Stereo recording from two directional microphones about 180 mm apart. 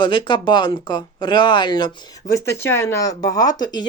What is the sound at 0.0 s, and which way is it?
Speech, 25° left (ahead or behind).